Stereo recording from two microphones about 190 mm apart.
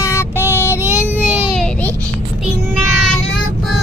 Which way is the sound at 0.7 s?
10° right (ahead or behind).